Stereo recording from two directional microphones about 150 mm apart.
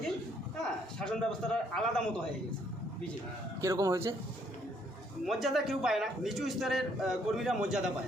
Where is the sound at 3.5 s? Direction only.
20° right (ahead or behind).